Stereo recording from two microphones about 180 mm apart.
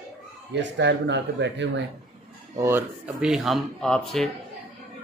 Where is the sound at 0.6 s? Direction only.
75° right (ahead or behind).